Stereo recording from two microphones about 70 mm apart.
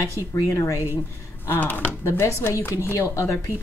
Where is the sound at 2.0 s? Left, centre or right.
Left.